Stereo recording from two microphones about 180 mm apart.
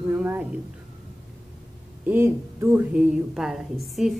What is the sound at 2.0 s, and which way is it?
Speech, 10° right (ahead or behind).